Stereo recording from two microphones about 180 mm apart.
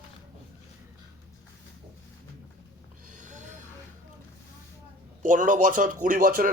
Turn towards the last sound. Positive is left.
turn(degrees=-50)  # may be behind; listen again after turning